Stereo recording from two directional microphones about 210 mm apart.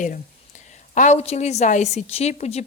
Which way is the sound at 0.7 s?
35° left (ahead or behind).